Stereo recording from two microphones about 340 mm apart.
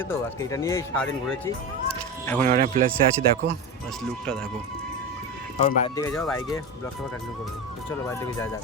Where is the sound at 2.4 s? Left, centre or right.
Right.